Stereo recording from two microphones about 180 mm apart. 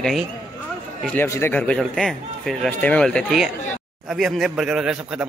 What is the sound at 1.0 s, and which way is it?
Speech, 10° left (ahead or behind).